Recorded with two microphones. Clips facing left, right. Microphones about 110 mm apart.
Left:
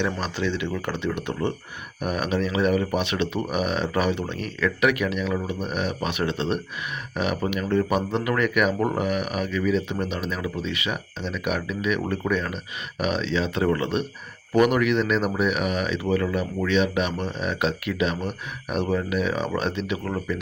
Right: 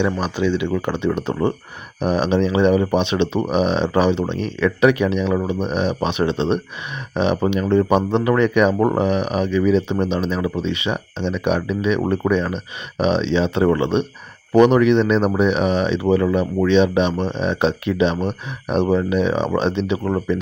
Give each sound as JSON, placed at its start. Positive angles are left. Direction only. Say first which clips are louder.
{"t": 0.0, "sound": "speech", "louder": "right 6 dB", "side_deg": -15}
{"t": 1.1, "sound": "speech", "louder": "right 6 dB", "side_deg": -40}